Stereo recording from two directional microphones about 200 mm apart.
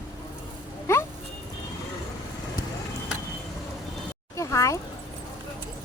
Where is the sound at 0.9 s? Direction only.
15° left (ahead or behind).